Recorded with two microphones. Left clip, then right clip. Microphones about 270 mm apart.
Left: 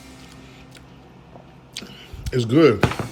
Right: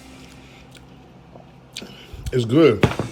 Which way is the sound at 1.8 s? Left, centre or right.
Centre.